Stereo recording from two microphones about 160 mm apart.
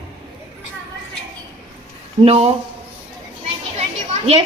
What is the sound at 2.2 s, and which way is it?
Speech, 40° right (ahead or behind).